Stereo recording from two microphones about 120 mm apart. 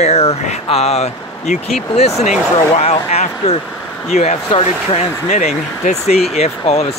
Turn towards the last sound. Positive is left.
turn(degrees=60)  # may be behind; listen again after turning